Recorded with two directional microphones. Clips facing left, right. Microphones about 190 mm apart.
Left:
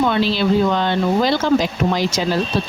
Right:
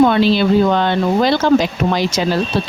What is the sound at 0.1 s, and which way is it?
Speech, 55° right (ahead or behind).